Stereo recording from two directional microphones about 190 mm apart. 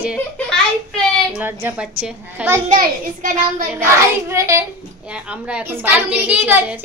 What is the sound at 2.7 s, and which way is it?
Speech, 45° right (ahead or behind).